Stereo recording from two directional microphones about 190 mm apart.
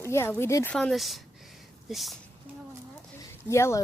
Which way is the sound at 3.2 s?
15° left (ahead or behind).